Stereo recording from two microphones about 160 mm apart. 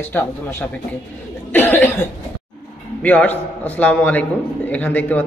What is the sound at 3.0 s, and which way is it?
A man's voice, 10° left (ahead or behind).